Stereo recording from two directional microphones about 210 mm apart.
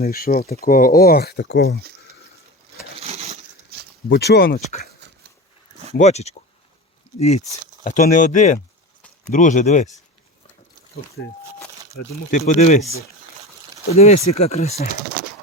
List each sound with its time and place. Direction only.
0.0 s speech: 45° left (ahead or behind)
3.0 s a sound: 30° right (ahead or behind)
3.7 s a sound: 50° right (ahead or behind)
4.1 s speech: 50° left (ahead or behind)
5.9 s speech: 30° left (ahead or behind)
11.9 s speech: 35° left (ahead or behind)
13.9 s speech: 30° left (ahead or behind)